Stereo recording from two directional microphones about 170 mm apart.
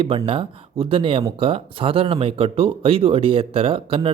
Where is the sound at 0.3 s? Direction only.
30° right (ahead or behind).